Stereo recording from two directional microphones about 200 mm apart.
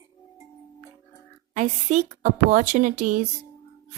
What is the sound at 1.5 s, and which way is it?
A woman's voice, 40° right (ahead or behind).